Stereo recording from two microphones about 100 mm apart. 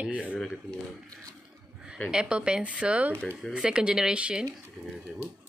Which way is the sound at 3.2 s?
10° left (ahead or behind).